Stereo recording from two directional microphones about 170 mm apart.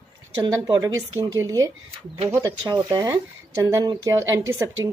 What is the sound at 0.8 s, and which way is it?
A woman's voice, 20° right (ahead or behind).